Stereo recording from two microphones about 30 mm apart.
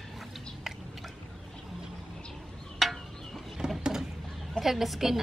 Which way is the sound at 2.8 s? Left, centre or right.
Centre.